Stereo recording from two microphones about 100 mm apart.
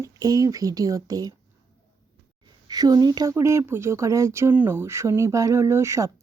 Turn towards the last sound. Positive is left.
turn(degrees=-30)  # may be behind; listen again after turning